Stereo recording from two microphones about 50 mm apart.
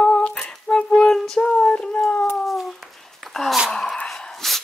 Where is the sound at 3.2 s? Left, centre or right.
Centre.